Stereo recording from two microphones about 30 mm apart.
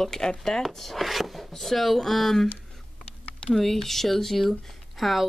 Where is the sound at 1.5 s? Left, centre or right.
Centre.